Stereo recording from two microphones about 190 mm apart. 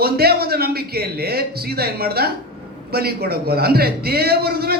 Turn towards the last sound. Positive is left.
turn(degrees=-55)  # may be behind; listen again after turning